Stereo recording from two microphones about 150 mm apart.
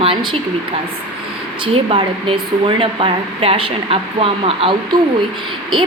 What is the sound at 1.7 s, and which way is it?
A woman's voice, 35° right (ahead or behind).